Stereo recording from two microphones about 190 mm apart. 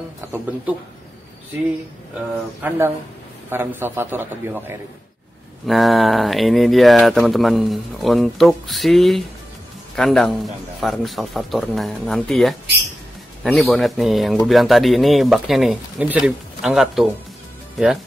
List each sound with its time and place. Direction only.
0.2 s a sound: 10° right (ahead or behind)
2.1 s a man's voice: 10° right (ahead or behind)
5.7 s speech: centre (ahead or behind)